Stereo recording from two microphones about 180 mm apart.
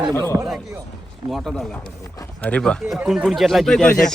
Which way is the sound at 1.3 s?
Centre (ahead or behind).